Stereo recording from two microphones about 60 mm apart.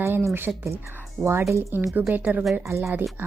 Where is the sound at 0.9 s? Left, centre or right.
Right.